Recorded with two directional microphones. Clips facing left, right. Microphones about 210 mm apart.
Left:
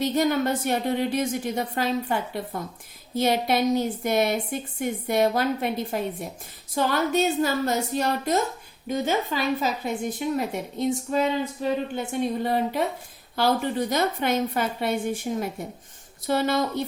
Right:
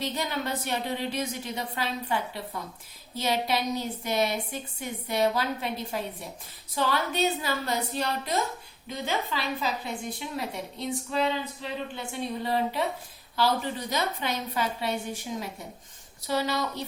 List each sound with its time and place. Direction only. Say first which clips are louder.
0.0 s a woman's voice: left 9 dB; 45° left (ahead or behind)